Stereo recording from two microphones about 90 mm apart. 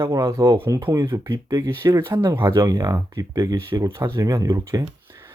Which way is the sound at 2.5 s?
45° right (ahead or behind).